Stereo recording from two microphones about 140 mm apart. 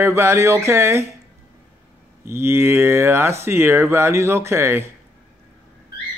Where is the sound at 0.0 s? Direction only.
20° right (ahead or behind).